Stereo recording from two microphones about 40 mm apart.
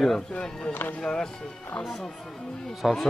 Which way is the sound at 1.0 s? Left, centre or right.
Centre.